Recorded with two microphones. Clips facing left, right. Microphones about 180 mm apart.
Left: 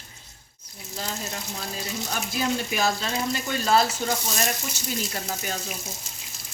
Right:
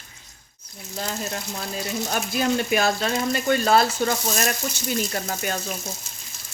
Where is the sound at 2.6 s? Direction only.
60° right (ahead or behind).